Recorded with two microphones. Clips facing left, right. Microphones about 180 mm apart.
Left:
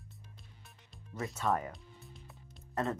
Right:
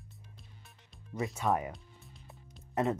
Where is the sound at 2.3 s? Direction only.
20° right (ahead or behind).